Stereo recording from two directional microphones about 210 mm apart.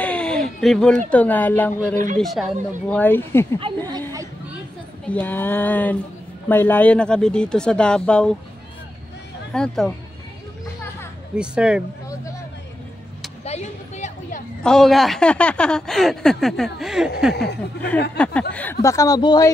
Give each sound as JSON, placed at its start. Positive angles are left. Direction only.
{"t": 0.0, "sound": "a sound", "side_deg": 5}
{"t": 1.1, "sound": "speech", "side_deg": 10}
{"t": 3.7, "sound": "speech", "side_deg": -25}
{"t": 4.1, "sound": "a sound", "side_deg": -15}
{"t": 5.0, "sound": "speech", "side_deg": 5}
{"t": 9.5, "sound": "speech", "side_deg": 5}
{"t": 11.3, "sound": "speech", "side_deg": -5}
{"t": 13.4, "sound": "a sound", "side_deg": 30}
{"t": 14.6, "sound": "speech", "side_deg": 0}
{"t": 17.3, "sound": "speech", "side_deg": 50}
{"t": 18.1, "sound": "speech", "side_deg": 5}